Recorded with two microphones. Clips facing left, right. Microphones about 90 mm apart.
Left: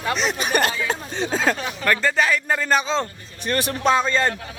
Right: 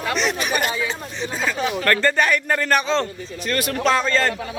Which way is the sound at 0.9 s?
65° left (ahead or behind).